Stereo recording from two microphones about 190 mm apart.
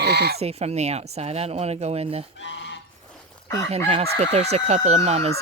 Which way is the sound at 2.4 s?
70° left (ahead or behind).